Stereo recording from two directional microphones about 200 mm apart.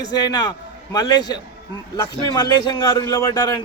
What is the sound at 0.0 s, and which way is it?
A man's voice, 20° left (ahead or behind).